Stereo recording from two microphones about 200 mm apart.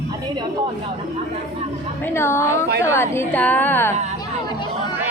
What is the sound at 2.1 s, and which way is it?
A woman's voice, 10° left (ahead or behind).